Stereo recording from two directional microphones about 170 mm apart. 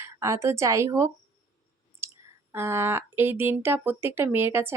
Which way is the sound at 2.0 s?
15° right (ahead or behind).